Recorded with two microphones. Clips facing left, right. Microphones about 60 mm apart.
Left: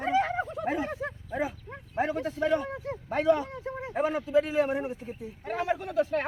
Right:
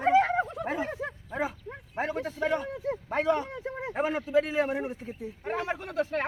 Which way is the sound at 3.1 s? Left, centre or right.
Right.